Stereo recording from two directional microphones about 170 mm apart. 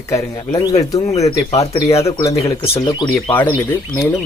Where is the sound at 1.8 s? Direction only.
35° left (ahead or behind).